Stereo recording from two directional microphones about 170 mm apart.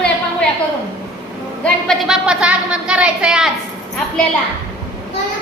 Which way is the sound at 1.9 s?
5° right (ahead or behind).